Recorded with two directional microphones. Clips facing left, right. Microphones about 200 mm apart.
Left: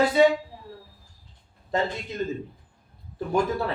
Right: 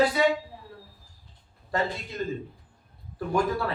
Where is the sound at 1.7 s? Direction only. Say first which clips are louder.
Left 2 dB; 20° left (ahead or behind).